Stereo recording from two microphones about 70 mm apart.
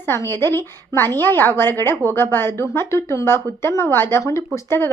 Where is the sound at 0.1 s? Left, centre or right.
Left.